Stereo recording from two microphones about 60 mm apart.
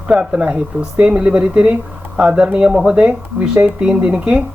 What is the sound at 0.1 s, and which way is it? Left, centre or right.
Speech, centre.